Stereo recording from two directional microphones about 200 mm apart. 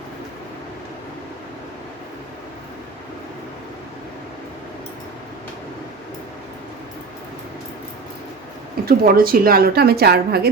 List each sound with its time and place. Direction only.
8.9 s a woman's voice: 45° right (ahead or behind)